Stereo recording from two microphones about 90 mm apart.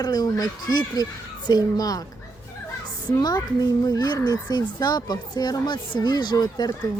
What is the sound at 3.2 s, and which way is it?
Speech, 45° left (ahead or behind).